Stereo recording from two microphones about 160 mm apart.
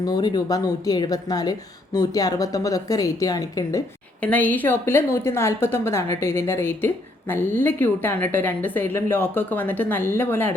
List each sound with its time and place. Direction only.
0.0 s a woman's voice: 25° left (ahead or behind)
4.2 s a woman's voice: 10° left (ahead or behind)